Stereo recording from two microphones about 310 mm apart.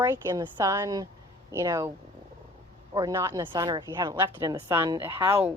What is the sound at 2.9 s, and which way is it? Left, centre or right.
A woman's voice, centre.